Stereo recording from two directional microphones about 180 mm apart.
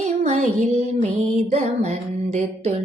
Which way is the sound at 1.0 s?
40° right (ahead or behind).